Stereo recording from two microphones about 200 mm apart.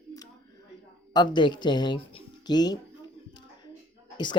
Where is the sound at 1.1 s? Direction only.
20° left (ahead or behind).